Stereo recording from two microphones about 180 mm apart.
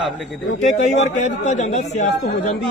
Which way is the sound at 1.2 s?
40° left (ahead or behind).